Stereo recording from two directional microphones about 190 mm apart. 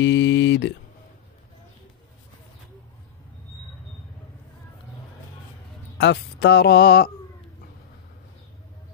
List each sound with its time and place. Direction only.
0.0 s speech: 65° left (ahead or behind)
5.9 s speech: 65° left (ahead or behind)